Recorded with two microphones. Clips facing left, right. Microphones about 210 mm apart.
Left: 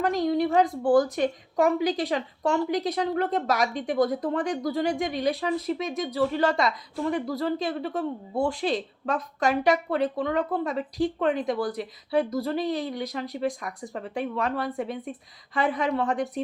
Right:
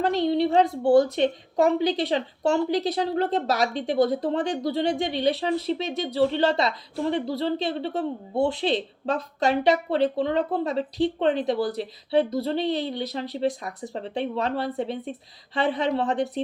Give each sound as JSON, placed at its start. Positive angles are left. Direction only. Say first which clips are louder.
{"t": 0.0, "sound": "a woman's voice", "louder": "right 2 dB", "side_deg": -30}